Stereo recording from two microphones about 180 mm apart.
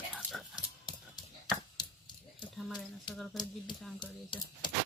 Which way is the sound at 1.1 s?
25° left (ahead or behind).